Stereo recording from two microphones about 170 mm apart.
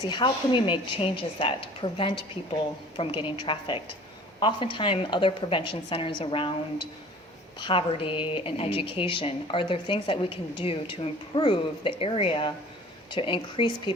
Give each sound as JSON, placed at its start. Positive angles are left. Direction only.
{"t": 0.0, "sound": "a woman's voice", "side_deg": 25}